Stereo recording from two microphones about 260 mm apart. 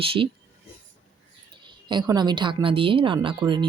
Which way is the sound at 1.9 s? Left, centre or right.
Centre.